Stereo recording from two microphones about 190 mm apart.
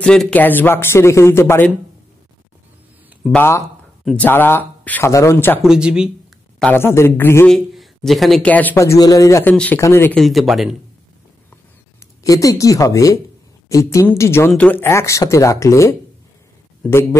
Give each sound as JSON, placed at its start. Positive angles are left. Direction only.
{"t": 0.0, "sound": "speech", "side_deg": 5}
{"t": 3.3, "sound": "speech", "side_deg": 10}
{"t": 4.0, "sound": "speech", "side_deg": 0}
{"t": 4.3, "sound": "speech", "side_deg": 10}
{"t": 5.6, "sound": "speech", "side_deg": -5}
{"t": 6.6, "sound": "speech", "side_deg": 10}
{"t": 7.5, "sound": "speech", "side_deg": 0}
{"t": 12.2, "sound": "speech", "side_deg": 15}